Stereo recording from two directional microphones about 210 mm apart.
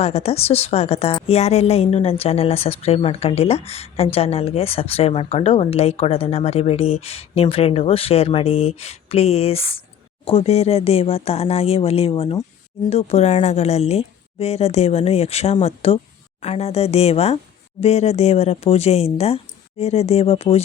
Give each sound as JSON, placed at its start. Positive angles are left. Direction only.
{"t": 0.0, "sound": "a woman's voice", "side_deg": 30}